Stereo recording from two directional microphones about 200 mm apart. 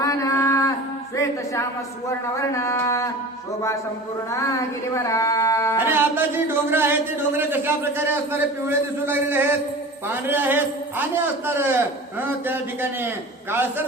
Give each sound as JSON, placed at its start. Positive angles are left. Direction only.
{"t": 0.0, "sound": "a sound", "side_deg": 15}
{"t": 2.4, "sound": "speech", "side_deg": 15}
{"t": 4.3, "sound": "speech", "side_deg": 15}
{"t": 5.8, "sound": "a man's voice", "side_deg": -10}